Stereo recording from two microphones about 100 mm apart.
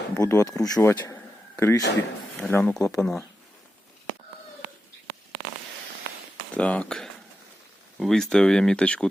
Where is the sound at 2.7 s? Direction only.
30° left (ahead or behind).